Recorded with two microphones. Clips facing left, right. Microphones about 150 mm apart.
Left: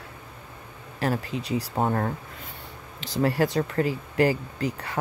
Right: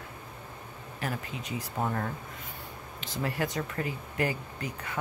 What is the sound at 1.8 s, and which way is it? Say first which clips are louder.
Speech: left 5 dB; 50° left (ahead or behind).